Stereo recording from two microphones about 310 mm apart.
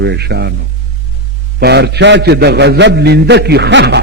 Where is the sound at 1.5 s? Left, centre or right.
Right.